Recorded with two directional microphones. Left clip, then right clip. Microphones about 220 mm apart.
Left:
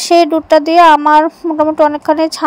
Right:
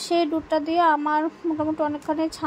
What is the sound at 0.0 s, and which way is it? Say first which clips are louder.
Speech: left 14 dB; 45° left (ahead or behind).